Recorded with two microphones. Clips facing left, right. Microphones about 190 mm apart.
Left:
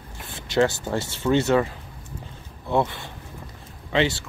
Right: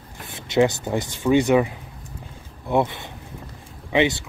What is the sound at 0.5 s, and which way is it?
Speech, 20° right (ahead or behind).